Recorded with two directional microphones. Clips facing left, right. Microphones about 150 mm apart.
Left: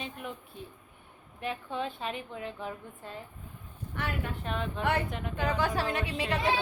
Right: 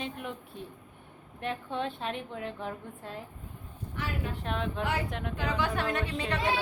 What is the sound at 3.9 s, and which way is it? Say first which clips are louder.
Speech: left 1 dB; 60° left (ahead or behind).